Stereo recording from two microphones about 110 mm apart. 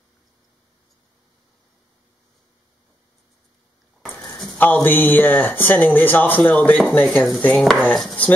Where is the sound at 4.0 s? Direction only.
Centre (ahead or behind).